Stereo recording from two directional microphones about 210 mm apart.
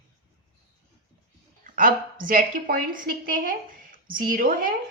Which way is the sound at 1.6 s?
40° right (ahead or behind).